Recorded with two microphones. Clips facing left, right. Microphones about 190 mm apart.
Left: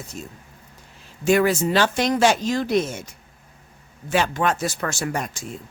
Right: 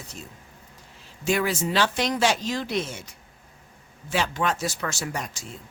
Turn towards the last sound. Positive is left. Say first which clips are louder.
# left 5 dB
turn(degrees=55)  # may be behind; listen again after turning